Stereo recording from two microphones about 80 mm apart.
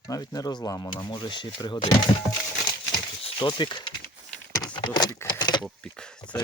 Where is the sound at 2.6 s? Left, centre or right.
Left.